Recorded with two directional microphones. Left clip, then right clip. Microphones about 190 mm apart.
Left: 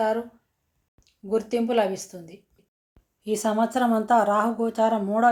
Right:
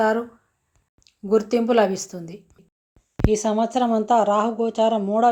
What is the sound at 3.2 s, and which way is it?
Speech, 25° right (ahead or behind).